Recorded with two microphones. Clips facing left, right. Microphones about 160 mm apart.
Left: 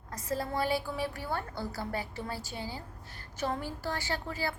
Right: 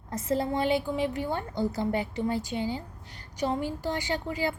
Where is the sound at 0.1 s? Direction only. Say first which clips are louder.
Right 6 dB; 25° right (ahead or behind).